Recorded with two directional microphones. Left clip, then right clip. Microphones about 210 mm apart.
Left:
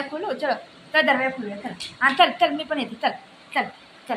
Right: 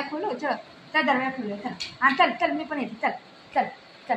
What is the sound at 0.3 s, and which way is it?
A woman's voice, 10° left (ahead or behind).